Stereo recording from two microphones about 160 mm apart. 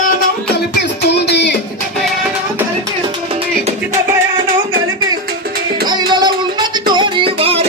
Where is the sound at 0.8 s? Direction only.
90° left.